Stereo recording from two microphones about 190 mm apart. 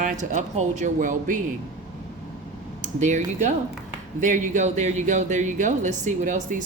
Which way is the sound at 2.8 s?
40° right (ahead or behind).